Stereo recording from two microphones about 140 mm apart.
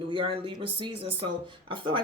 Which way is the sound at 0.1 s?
35° right (ahead or behind).